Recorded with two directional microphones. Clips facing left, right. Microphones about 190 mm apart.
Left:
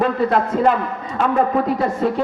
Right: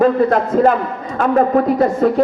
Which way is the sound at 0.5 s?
45° right (ahead or behind).